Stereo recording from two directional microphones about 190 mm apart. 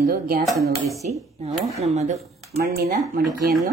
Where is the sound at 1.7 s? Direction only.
35° right (ahead or behind).